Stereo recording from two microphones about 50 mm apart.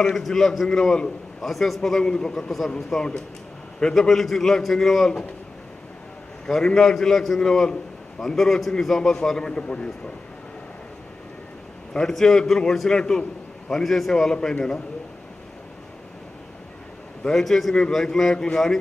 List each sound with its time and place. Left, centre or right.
0.0 s a man's voice: centre
1.4 s a man's voice: centre
6.4 s a man's voice: centre
11.9 s a man's voice: centre
17.3 s a man's voice: centre